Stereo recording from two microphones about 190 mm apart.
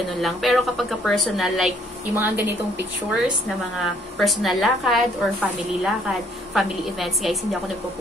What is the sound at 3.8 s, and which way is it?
A woman's voice, centre (ahead or behind).